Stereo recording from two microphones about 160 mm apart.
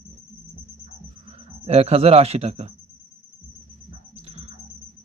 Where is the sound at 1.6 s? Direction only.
40° right (ahead or behind).